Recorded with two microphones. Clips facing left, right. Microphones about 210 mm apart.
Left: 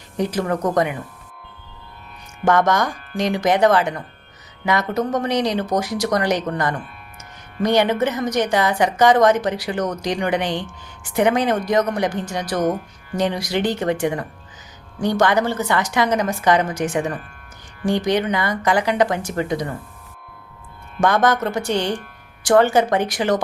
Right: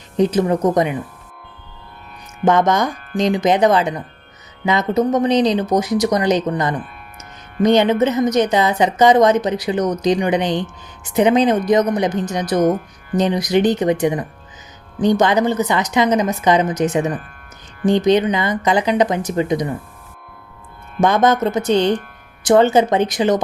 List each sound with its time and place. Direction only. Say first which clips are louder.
0.2 s a woman's voice: right 6 dB; 20° right (ahead or behind)
2.4 s a woman's voice: right 2 dB; 20° right (ahead or behind)
21.0 s a woman's voice: right 3 dB; 20° right (ahead or behind)